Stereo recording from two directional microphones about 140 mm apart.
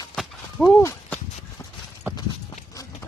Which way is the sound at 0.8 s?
10° left (ahead or behind).